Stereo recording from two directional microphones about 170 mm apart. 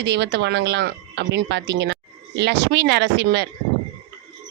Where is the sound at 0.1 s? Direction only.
90° right.